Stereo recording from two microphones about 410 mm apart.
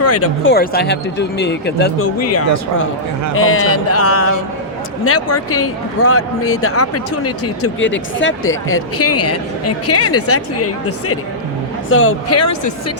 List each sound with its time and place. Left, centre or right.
0.0 s a woman's voice: left